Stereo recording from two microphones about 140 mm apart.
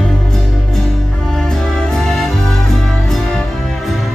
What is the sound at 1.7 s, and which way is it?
Music, 5° left (ahead or behind).